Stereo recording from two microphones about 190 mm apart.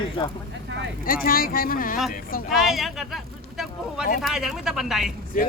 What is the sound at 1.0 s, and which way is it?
Speech, 50° left (ahead or behind).